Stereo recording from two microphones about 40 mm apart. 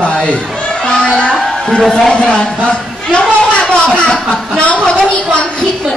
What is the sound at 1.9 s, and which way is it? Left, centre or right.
Speech, left.